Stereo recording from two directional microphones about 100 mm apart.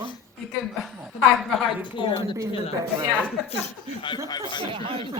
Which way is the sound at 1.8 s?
55° left (ahead or behind).